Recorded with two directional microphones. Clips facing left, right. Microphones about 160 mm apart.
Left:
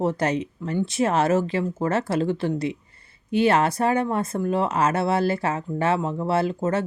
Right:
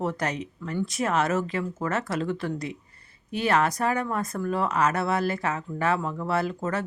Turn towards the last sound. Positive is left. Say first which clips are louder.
# left 4 dB
turn(degrees=25)  # may be behind; listen again after turning